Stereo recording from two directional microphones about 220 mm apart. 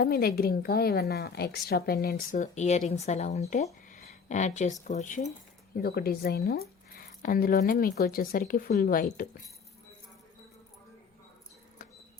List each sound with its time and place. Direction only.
0.0 s a woman's voice: 45° left (ahead or behind)
5.7 s a woman's voice: 45° left (ahead or behind)